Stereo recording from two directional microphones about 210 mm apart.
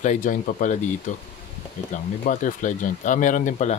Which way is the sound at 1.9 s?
35° left (ahead or behind).